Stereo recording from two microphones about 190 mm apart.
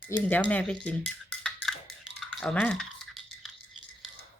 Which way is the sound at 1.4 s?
Centre (ahead or behind).